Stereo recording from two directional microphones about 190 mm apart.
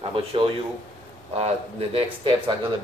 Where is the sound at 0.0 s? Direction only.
30° right (ahead or behind).